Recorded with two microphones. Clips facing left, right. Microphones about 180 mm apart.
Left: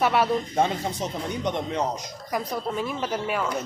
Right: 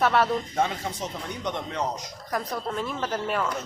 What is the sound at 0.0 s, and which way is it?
Speech, 10° left (ahead or behind).